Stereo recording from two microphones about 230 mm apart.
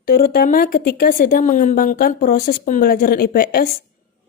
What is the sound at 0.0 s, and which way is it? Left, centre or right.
Speech, left.